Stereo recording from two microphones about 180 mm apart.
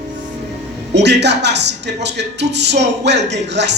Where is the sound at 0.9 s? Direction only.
70° right (ahead or behind).